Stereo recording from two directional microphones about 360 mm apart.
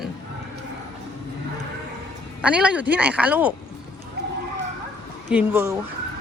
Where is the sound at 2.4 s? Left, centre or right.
Centre.